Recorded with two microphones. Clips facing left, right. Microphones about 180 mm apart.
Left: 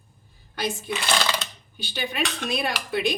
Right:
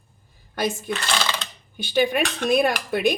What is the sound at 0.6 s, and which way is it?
Speech, 50° right (ahead or behind).